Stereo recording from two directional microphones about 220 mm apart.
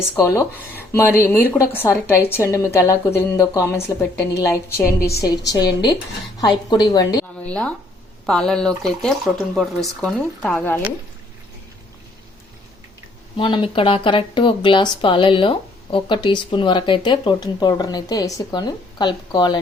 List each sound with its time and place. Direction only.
0.2 s speech: 15° left (ahead or behind)
7.4 s speech: 5° left (ahead or behind)
13.3 s speech: 20° left (ahead or behind)